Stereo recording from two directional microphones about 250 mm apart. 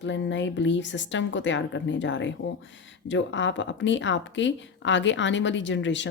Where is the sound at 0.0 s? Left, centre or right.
Left.